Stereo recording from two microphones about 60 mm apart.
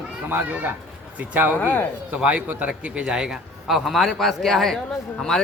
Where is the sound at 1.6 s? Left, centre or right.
Left.